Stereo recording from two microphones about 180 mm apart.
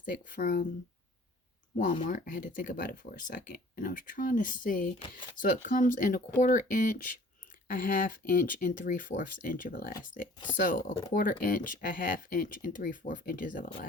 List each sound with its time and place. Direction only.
0.0 s speech: 50° left (ahead or behind)
1.7 s speech: 45° left (ahead or behind)
4.9 s speech: 25° left (ahead or behind)
5.4 s speech: 45° left (ahead or behind)